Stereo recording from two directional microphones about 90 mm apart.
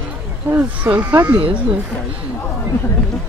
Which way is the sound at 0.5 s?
25° right (ahead or behind).